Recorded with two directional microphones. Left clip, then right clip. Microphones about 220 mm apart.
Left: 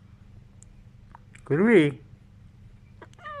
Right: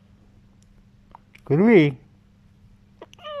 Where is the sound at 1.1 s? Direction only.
20° right (ahead or behind).